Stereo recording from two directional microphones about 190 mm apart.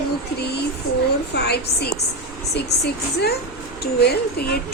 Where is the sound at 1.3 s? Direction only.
60° left (ahead or behind).